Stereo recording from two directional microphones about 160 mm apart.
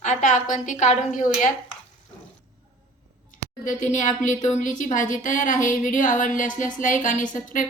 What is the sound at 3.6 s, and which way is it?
Speech, 50° left (ahead or behind).